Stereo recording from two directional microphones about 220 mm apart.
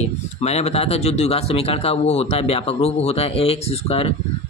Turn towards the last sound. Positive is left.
turn(degrees=25)  # may be behind; listen again after turning